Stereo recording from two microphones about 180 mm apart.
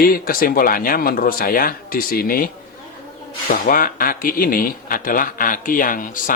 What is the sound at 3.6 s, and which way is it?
A man's voice, 50° left (ahead or behind).